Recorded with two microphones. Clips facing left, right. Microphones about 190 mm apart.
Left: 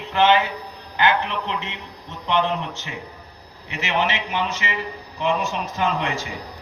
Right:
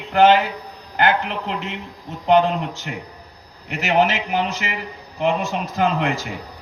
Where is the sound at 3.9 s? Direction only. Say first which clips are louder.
Right 6 dB; 40° right (ahead or behind).